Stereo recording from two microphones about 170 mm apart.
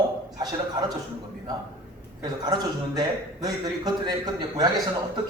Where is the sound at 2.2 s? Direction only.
25° right (ahead or behind).